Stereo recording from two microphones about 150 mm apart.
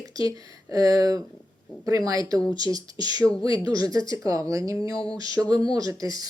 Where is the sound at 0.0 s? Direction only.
25° right (ahead or behind).